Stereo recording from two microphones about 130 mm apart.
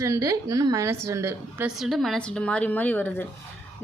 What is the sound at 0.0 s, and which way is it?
A woman's voice, 25° right (ahead or behind).